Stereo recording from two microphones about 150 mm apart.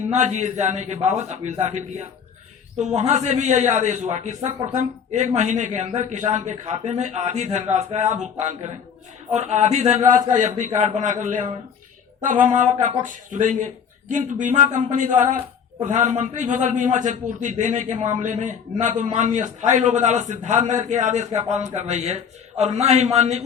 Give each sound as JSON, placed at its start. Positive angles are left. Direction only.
{"t": 0.1, "sound": "a man's voice", "side_deg": -50}